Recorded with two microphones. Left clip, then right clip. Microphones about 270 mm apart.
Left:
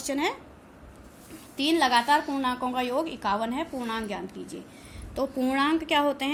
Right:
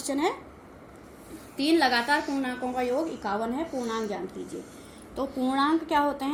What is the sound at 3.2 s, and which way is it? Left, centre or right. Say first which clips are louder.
Speech: left 5 dB; left.